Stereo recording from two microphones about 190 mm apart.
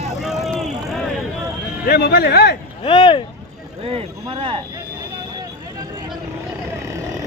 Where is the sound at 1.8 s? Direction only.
55° left (ahead or behind).